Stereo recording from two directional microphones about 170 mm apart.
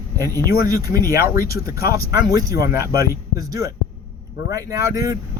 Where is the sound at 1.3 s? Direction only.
60° left (ahead or behind).